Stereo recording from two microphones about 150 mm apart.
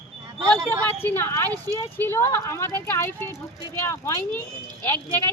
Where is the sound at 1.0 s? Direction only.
15° left (ahead or behind).